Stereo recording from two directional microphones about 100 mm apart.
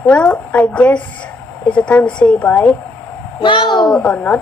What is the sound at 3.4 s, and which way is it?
Speech, 55° left (ahead or behind).